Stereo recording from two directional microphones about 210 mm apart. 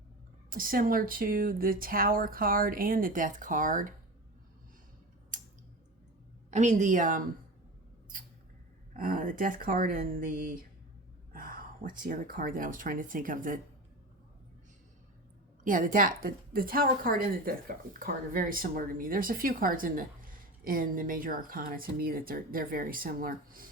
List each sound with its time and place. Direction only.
0.5 s a woman's voice: 40° right (ahead or behind)
5.3 s a sound: 40° right (ahead or behind)
6.5 s speech: 35° right (ahead or behind)
8.9 s speech: 40° right (ahead or behind)
15.6 s a woman's voice: 40° right (ahead or behind)